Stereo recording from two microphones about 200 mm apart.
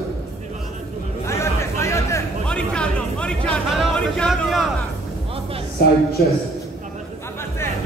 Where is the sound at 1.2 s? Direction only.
15° left (ahead or behind).